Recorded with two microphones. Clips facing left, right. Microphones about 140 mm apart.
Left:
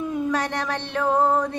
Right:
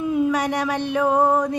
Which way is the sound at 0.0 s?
10° right (ahead or behind).